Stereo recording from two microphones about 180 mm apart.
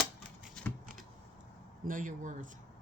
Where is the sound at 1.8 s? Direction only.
45° right (ahead or behind).